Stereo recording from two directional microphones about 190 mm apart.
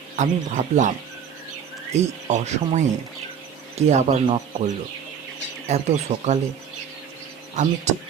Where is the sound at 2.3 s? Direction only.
40° right (ahead or behind).